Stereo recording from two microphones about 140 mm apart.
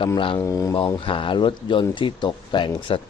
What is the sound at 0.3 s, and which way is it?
Speech, 25° left (ahead or behind).